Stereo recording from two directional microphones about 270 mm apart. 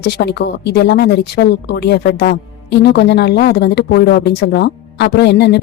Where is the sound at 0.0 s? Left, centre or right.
Left.